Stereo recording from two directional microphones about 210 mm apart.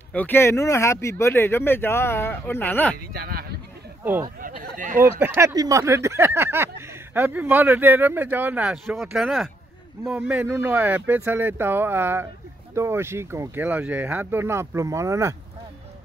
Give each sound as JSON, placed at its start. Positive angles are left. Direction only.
{"t": 0.1, "sound": "speech", "side_deg": 10}
{"t": 3.1, "sound": "speech", "side_deg": -45}
{"t": 4.0, "sound": "speech", "side_deg": -10}
{"t": 4.4, "sound": "a sound", "side_deg": -40}
{"t": 4.9, "sound": "speech", "side_deg": -10}